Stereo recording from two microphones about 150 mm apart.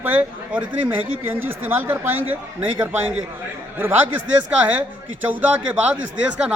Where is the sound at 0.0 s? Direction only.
10° right (ahead or behind).